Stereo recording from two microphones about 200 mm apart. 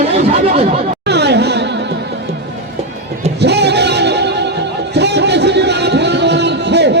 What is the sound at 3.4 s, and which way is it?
Music, 55° right (ahead or behind).